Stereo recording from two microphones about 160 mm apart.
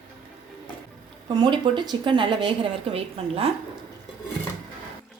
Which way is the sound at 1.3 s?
30° right (ahead or behind).